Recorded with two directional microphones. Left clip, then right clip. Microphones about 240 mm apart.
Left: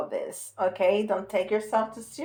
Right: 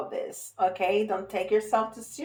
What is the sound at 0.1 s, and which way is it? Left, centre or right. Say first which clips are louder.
Speech: left 2 dB; left.